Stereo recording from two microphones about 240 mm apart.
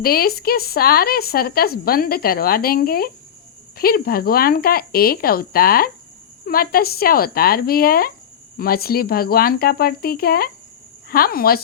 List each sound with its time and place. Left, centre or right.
0.0 s speech: left